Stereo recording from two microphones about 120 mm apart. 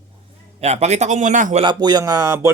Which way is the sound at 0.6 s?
65° right (ahead or behind).